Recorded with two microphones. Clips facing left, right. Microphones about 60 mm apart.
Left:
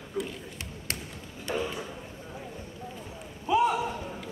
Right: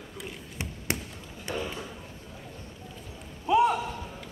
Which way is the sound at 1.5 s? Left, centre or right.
Centre.